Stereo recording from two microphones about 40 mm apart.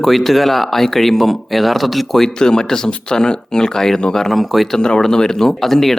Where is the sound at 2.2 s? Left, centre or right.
Centre.